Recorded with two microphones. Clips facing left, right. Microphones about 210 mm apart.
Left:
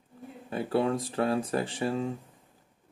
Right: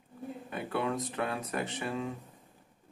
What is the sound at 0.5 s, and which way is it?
Speech, 30° left (ahead or behind).